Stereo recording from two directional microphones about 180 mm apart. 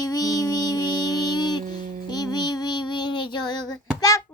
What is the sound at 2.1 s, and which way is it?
Child singing, 20° left (ahead or behind).